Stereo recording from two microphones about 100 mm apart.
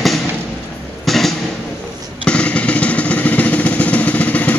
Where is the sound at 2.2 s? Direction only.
10° left (ahead or behind).